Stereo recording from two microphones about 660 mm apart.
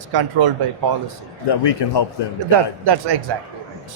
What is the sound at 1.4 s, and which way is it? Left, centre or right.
Speech, left.